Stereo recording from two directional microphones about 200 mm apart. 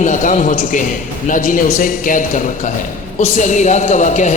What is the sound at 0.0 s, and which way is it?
A man's voice, 40° left (ahead or behind).